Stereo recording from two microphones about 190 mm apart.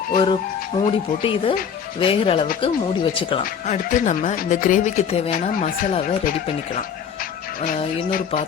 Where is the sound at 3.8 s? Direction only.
40° left (ahead or behind).